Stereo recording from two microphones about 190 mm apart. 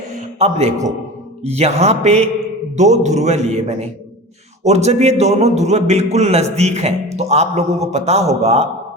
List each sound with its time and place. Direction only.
0.1 s a man's voice: 35° right (ahead or behind)